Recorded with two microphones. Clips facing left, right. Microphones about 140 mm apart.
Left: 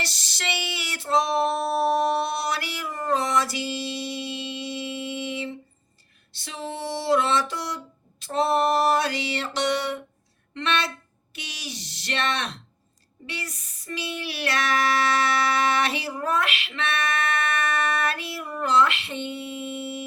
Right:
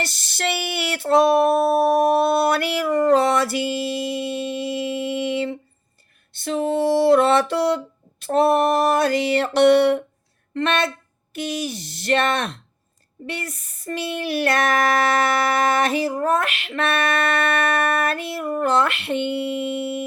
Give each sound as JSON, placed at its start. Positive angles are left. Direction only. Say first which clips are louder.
{"t": 0.0, "sound": "female singing", "louder": "right 7 dB", "side_deg": -50}
{"t": 8.2, "sound": "music", "louder": "right 5 dB", "side_deg": -55}
{"t": 10.5, "sound": "music", "louder": "right 5 dB", "side_deg": -50}